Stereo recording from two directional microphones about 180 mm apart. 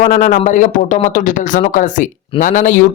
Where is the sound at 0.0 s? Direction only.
45° left (ahead or behind).